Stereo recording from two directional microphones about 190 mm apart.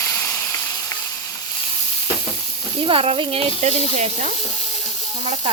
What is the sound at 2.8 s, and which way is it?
Speech, 30° right (ahead or behind).